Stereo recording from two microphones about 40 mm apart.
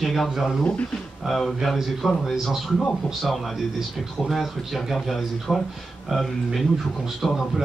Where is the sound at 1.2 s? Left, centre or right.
Centre.